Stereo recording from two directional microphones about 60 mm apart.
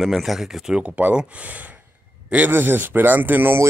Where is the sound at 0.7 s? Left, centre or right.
Right.